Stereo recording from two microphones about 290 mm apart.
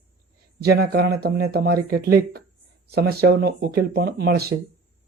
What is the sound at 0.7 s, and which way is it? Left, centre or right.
Speech, right.